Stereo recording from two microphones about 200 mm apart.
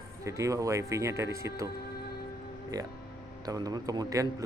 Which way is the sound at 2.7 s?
20° right (ahead or behind).